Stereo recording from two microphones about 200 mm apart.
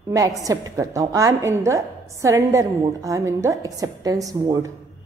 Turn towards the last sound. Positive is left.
turn(degrees=-15)  # may be behind; listen again after turning